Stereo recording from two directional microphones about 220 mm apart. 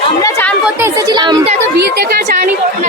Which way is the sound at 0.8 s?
15° right (ahead or behind).